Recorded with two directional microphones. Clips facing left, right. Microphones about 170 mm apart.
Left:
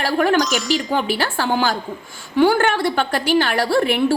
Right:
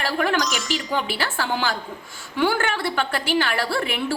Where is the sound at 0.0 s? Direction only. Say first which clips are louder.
Left 6 dB; 40° left (ahead or behind).